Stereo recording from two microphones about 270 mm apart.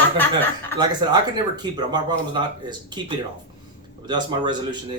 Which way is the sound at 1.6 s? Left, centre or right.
Centre.